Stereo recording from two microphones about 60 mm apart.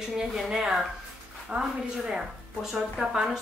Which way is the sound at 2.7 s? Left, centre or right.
Centre.